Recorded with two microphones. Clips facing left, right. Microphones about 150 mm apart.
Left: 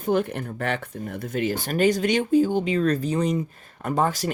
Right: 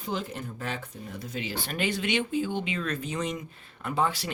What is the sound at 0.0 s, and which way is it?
Speech, 55° left (ahead or behind).